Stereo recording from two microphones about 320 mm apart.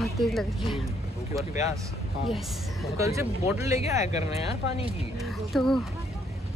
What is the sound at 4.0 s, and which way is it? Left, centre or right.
Speech, centre.